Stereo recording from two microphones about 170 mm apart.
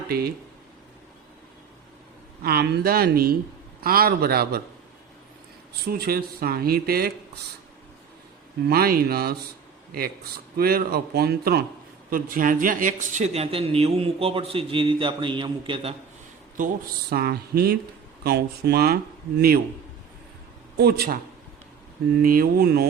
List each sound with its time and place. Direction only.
0.1 s speech: 65° right (ahead or behind)
2.4 s speech: 65° right (ahead or behind)
5.8 s speech: 65° right (ahead or behind)
8.7 s speech: 60° right (ahead or behind)
10.6 s speech: 60° right (ahead or behind)
12.1 s speech: 55° right (ahead or behind); by 16.0 s 35° right (ahead or behind)
16.6 s speech: 50° right (ahead or behind)
17.1 s speech: 70° right (ahead or behind)
20.7 s speech: 65° right (ahead or behind)
22.2 s speech: 60° right (ahead or behind)